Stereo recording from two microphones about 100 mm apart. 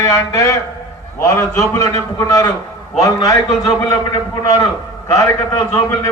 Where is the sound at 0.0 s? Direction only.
30° left (ahead or behind).